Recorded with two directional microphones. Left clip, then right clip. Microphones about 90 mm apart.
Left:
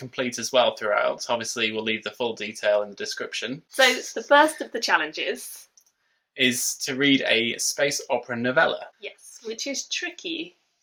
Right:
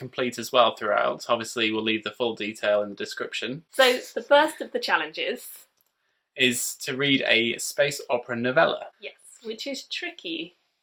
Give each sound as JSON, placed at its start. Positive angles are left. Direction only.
{"t": 0.0, "sound": "speech", "side_deg": -45}
{"t": 3.8, "sound": "speech", "side_deg": 30}
{"t": 6.3, "sound": "speech", "side_deg": -45}
{"t": 9.0, "sound": "speech", "side_deg": 25}